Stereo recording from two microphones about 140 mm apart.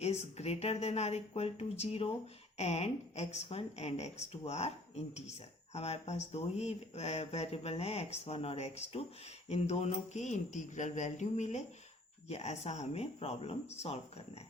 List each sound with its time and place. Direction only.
0.0 s speech: 50° left (ahead or behind)